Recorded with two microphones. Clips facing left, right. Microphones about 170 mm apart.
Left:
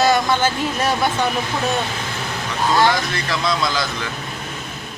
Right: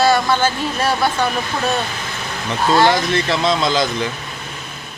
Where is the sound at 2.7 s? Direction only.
25° right (ahead or behind).